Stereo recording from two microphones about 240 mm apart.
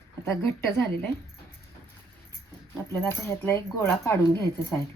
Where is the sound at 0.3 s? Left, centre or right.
Centre.